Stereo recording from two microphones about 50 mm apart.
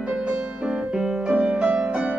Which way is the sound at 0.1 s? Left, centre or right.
Right.